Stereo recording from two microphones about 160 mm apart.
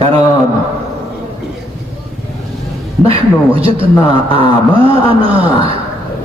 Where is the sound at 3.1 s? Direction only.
35° right (ahead or behind).